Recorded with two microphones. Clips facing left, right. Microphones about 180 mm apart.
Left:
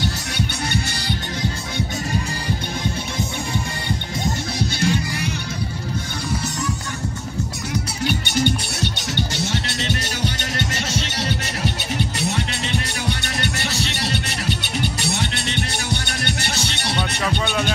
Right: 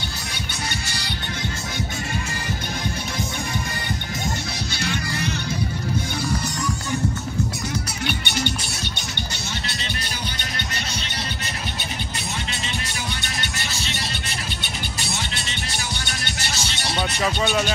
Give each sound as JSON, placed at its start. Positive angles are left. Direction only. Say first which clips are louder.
{"t": 4.6, "sound": "music", "louder": "left 7 dB", "side_deg": 50}
{"t": 8.0, "sound": "music", "louder": "left 7 dB", "side_deg": 40}
{"t": 9.4, "sound": "music", "louder": "left 7 dB", "side_deg": 90}
{"t": 13.4, "sound": "music", "louder": "left 7 dB", "side_deg": 65}